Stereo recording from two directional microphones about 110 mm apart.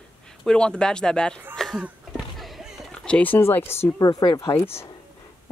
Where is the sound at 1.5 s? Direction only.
Centre (ahead or behind).